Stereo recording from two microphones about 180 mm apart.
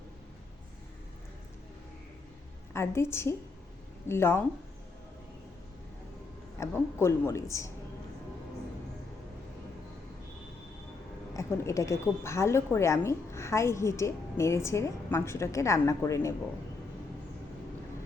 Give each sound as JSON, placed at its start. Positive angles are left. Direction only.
{"t": 2.7, "sound": "a woman's voice", "side_deg": 15}
{"t": 6.6, "sound": "a woman's voice", "side_deg": 15}
{"t": 11.3, "sound": "a woman's voice", "side_deg": 15}